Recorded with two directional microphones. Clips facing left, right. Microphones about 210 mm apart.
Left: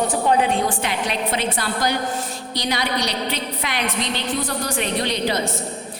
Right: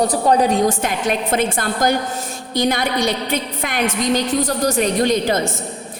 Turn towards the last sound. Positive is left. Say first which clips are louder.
# right 5 dB
turn(degrees=-45)  # may be behind; listen again after turning